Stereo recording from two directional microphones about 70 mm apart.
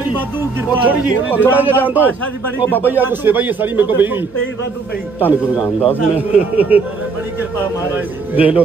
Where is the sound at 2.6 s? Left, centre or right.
Left.